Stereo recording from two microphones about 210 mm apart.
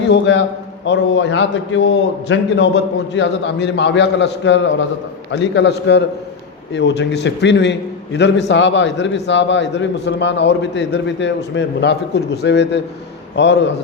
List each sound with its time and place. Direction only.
0.1 s a man's voice: 55° left (ahead or behind)